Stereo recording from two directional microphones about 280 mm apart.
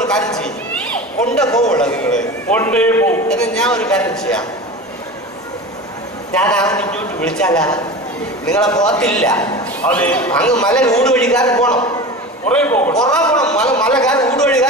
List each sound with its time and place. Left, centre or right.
0.0 s a man's voice: centre
6.3 s a man's voice: centre
8.8 s a man's voice: centre